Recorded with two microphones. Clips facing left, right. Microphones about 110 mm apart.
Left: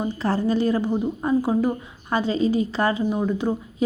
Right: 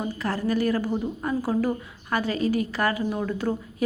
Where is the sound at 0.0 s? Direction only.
30° left (ahead or behind).